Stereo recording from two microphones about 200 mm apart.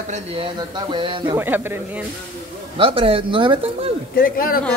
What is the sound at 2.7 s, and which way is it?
Speech, 25° right (ahead or behind).